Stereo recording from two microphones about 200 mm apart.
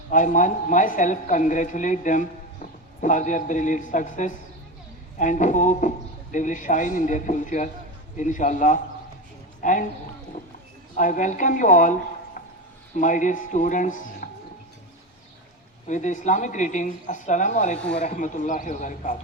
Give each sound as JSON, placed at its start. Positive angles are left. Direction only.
{"t": 0.1, "sound": "speech", "side_deg": 40}
{"t": 10.9, "sound": "speech", "side_deg": 40}
{"t": 13.0, "sound": "speech", "side_deg": 40}
{"t": 15.9, "sound": "speech", "side_deg": 35}